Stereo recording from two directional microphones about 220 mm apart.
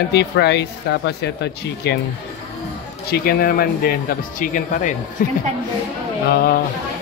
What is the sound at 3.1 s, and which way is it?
A man's voice, 45° left (ahead or behind).